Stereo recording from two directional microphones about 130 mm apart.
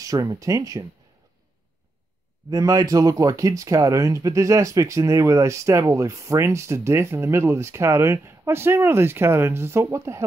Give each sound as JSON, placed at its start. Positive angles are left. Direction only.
{"t": 0.0, "sound": "speech", "side_deg": -25}
{"t": 2.5, "sound": "speech", "side_deg": -25}